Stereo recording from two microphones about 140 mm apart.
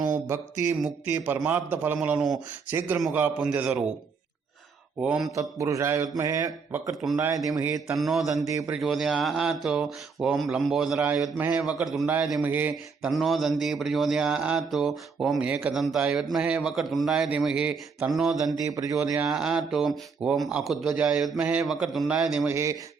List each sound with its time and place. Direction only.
0.1 s a sound: 20° right (ahead or behind)
1.2 s a man's voice: 15° right (ahead or behind)
4.9 s speech: 5° right (ahead or behind)
5.3 s mantra: 20° right (ahead or behind)
6.7 s speech: 15° right (ahead or behind)
7.2 s mantra: 20° right (ahead or behind)
7.9 s speech: centre (ahead or behind)
8.4 s mantra: 25° right (ahead or behind)
8.7 s speech: centre (ahead or behind)
12.4 s a man's voice: 15° right (ahead or behind)
13.1 s speech: centre (ahead or behind)
18.6 s mantra: 25° right (ahead or behind)
18.9 s speech: 10° right (ahead or behind)
22.5 s mantra: 20° right (ahead or behind)